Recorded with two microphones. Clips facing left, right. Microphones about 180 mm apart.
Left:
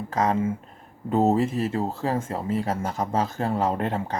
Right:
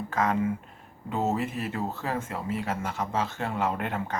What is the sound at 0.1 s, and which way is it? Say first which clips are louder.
Speech: left 3 dB; 30° left (ahead or behind).